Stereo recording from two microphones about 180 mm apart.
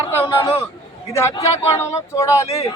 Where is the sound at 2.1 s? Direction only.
15° left (ahead or behind).